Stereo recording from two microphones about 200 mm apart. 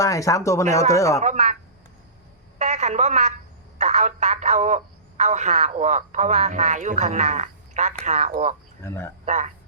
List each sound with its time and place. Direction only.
0.0 s speech: 15° left (ahead or behind)
1.2 s speech: 35° right (ahead or behind)
2.6 s a sound: 35° right (ahead or behind)
3.8 s speech: 35° right (ahead or behind)
8.8 s speech: 10° left (ahead or behind)
9.2 s speech: 35° right (ahead or behind)